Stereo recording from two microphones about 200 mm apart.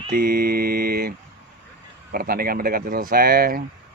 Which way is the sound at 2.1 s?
45° right (ahead or behind).